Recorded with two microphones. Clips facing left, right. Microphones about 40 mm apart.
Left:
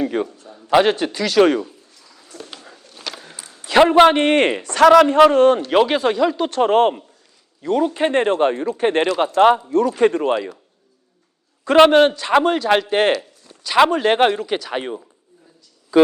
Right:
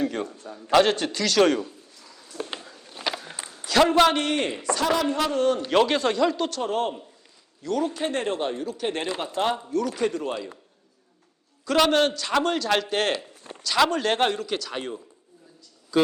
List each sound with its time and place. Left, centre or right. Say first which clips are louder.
0.0 s a man's voice: left 6 dB; centre
2.4 s a sound: right 5 dB; right
2.8 s a sound: right 3 dB; centre
3.3 s a sound: right 1 dB; right
3.7 s speech: left 7 dB; left
4.4 s a man's voice: left 10 dB; left
5.0 s a man's voice: left 11 dB; left
5.7 s a man's voice: left 5 dB; centre
6.6 s a man's voice: left 11 dB; left
7.6 s a man's voice: left 8 dB; left
11.6 s speech: left 9 dB; left
13.5 s a sound: right 6 dB; right
13.9 s speech: left 7 dB; left